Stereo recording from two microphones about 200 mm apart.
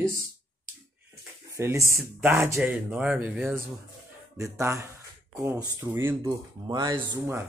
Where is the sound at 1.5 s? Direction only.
15° right (ahead or behind).